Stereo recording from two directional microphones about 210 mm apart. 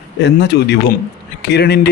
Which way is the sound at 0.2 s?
55° left (ahead or behind).